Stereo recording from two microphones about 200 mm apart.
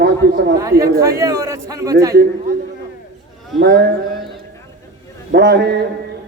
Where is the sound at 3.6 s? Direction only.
55° right (ahead or behind).